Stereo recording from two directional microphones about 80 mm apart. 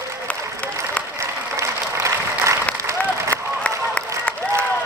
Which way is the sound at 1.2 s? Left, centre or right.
Right.